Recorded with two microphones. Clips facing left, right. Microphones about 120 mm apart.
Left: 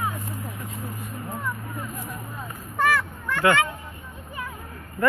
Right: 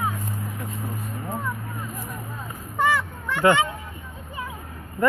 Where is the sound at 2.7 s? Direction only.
15° right (ahead or behind).